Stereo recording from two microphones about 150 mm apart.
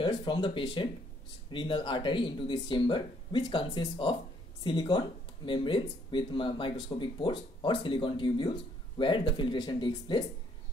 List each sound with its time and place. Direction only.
0.0 s speech: 30° left (ahead or behind)